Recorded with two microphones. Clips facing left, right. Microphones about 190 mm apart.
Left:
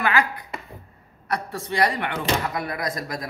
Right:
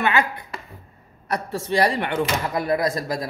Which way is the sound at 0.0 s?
25° right (ahead or behind).